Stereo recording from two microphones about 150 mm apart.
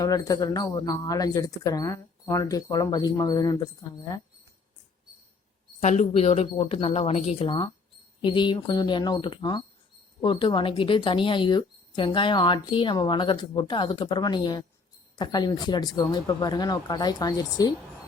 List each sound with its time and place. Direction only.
0.0 s speech: 25° left (ahead or behind)
5.8 s speech: 50° left (ahead or behind); by 17.7 s 25° left (ahead or behind)